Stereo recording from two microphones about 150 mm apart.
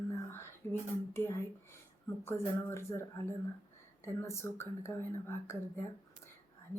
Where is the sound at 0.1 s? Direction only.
15° left (ahead or behind).